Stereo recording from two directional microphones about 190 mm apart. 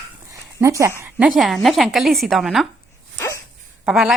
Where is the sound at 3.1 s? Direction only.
15° left (ahead or behind).